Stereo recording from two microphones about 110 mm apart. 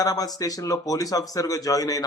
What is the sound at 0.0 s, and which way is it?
Speech, 35° left (ahead or behind).